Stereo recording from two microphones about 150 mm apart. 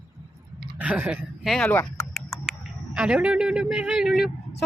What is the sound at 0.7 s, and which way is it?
Speech, 10° right (ahead or behind).